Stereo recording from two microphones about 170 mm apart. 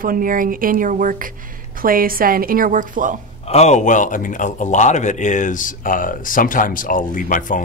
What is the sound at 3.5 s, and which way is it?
A man's voice, 40° left (ahead or behind).